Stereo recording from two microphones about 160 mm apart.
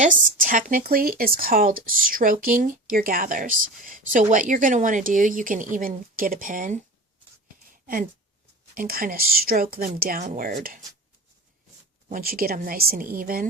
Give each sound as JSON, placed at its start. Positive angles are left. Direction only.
{"t": 0.0, "sound": "speech", "side_deg": -55}
{"t": 8.7, "sound": "speech", "side_deg": -60}
{"t": 12.0, "sound": "speech", "side_deg": -60}